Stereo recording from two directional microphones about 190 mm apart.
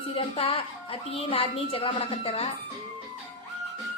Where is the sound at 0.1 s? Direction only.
30° left (ahead or behind).